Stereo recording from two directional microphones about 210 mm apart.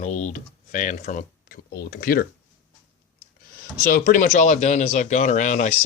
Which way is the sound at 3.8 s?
40° left (ahead or behind).